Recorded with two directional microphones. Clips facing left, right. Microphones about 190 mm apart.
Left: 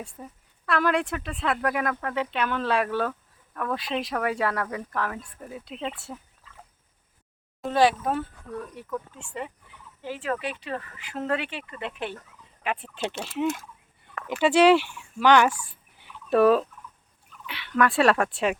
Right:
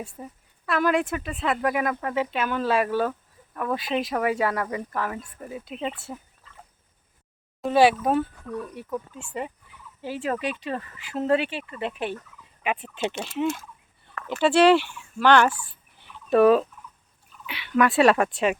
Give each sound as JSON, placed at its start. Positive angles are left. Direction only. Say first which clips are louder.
{"t": 0.0, "sound": "speech", "louder": "right 3 dB", "side_deg": -5}
{"t": 7.6, "sound": "speech", "louder": "right 3 dB", "side_deg": -10}
{"t": 12.6, "sound": "speech", "louder": "right 2 dB", "side_deg": -5}
{"t": 16.0, "sound": "fowl", "louder": "right 2 dB", "side_deg": 5}
{"t": 17.4, "sound": "speech", "louder": "right 2 dB", "side_deg": -5}